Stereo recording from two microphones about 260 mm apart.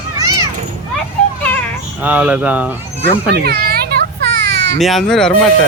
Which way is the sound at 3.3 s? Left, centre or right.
Right.